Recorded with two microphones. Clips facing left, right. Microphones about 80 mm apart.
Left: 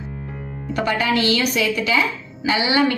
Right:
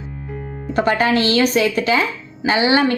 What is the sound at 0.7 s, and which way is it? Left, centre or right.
A woman's voice, right.